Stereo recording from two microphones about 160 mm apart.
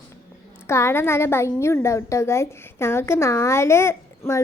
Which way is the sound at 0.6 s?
15° left (ahead or behind).